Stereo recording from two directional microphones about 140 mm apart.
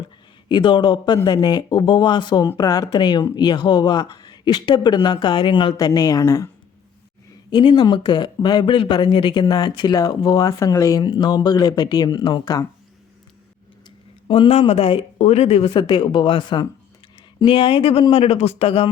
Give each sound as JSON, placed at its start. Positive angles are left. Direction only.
{"t": 0.4, "sound": "speech", "side_deg": 35}
{"t": 7.5, "sound": "speech", "side_deg": 35}
{"t": 14.3, "sound": "speech", "side_deg": 40}
{"t": 15.7, "sound": "speech", "side_deg": 35}